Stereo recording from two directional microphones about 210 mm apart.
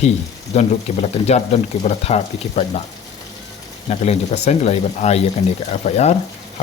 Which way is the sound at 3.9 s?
30° left (ahead or behind).